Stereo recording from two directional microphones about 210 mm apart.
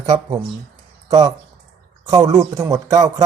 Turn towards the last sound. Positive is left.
turn(degrees=-15)  # may be behind; listen again after turning